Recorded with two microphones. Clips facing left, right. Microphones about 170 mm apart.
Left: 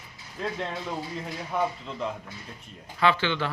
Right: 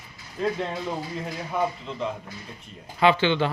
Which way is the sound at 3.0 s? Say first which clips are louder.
Right 4 dB; 20° right (ahead or behind).